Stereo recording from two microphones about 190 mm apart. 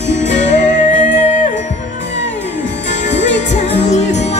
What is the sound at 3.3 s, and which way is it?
Music, 35° left (ahead or behind).